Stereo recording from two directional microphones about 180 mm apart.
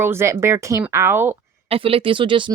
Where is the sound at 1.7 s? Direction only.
30° right (ahead or behind).